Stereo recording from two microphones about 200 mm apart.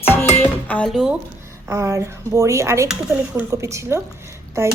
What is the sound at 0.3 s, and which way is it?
Music, 10° left (ahead or behind).